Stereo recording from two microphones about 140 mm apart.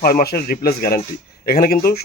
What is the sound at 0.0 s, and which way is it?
Speech, 90° left.